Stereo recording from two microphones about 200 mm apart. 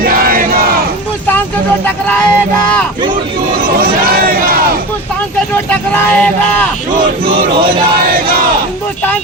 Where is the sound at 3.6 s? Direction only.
50° right (ahead or behind).